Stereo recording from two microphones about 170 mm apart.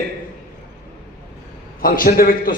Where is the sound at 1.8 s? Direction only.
60° left (ahead or behind).